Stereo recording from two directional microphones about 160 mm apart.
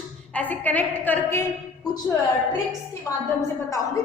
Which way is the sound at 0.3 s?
10° left (ahead or behind).